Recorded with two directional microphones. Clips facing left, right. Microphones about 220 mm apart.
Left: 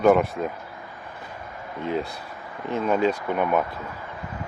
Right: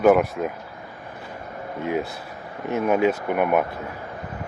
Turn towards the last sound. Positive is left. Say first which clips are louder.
# right 2 dB
turn(degrees=-10)  # may be behind; listen again after turning